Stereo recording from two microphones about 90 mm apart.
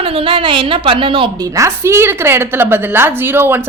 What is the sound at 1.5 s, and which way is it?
A woman's voice, 35° right (ahead or behind).